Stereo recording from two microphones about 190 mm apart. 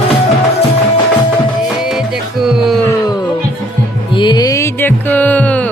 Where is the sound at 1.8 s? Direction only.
Centre (ahead or behind).